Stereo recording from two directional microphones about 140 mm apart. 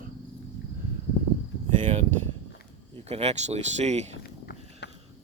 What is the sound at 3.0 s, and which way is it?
Speech, 50° right (ahead or behind).